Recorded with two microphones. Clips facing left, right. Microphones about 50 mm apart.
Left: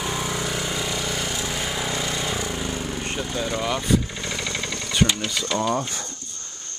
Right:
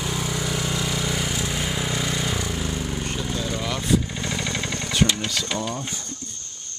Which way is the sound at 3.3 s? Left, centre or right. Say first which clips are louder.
Left 4 dB; centre.